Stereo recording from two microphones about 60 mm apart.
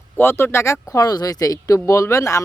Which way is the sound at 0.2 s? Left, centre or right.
Left.